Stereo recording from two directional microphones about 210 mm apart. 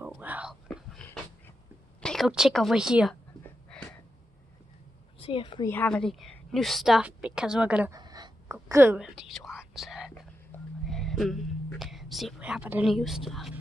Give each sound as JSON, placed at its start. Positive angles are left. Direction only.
{"t": 0.0, "sound": "whispering", "side_deg": -10}
{"t": 2.0, "sound": "a woman's voice", "side_deg": 0}
{"t": 3.7, "sound": "wheeze", "side_deg": 5}
{"t": 5.2, "sound": "a woman's voice", "side_deg": 25}
{"t": 5.7, "sound": "a woman's voice", "side_deg": 5}
{"t": 7.9, "sound": "whispering", "side_deg": -20}